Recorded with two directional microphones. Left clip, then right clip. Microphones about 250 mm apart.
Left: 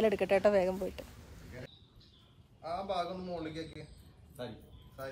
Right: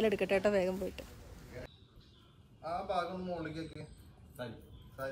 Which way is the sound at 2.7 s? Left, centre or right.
Left.